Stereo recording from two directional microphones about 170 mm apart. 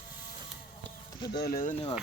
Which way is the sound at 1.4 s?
55° left (ahead or behind).